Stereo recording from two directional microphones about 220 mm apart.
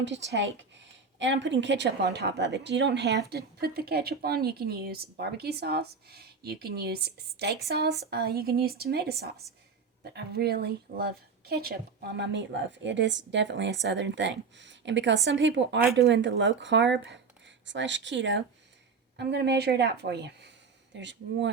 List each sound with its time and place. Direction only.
0.0 s a woman's voice: 55° right (ahead or behind)